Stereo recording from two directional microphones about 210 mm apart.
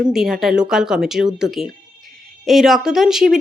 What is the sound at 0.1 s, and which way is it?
Speech, centre (ahead or behind).